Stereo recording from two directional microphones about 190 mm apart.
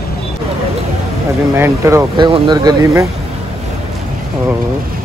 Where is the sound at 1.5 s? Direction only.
15° right (ahead or behind).